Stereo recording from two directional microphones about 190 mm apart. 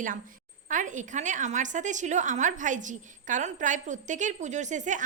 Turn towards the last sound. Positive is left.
turn(degrees=-40)  # may be behind; listen again after turning